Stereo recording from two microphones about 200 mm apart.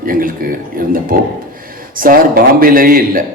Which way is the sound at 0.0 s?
45° right (ahead or behind).